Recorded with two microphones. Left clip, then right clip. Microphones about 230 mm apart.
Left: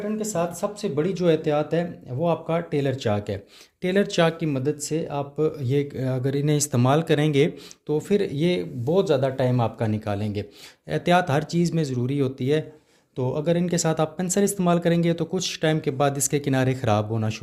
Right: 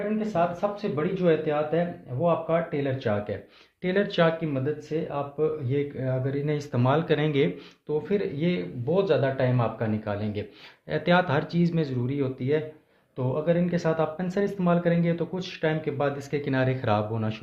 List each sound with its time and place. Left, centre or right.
0.2 s speech: left